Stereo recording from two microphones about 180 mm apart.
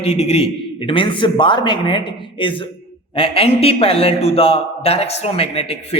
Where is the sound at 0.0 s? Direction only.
35° left (ahead or behind).